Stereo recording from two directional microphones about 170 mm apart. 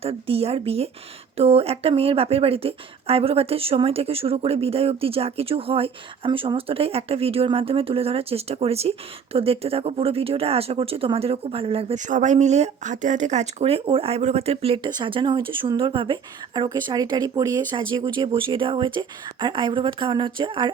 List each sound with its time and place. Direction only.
0.0 s a woman's voice: 35° right (ahead or behind)